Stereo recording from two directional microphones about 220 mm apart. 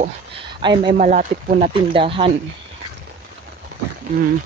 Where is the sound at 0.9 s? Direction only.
35° right (ahead or behind).